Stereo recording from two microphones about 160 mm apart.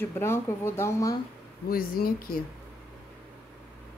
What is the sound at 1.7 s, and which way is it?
Speech, 65° left (ahead or behind).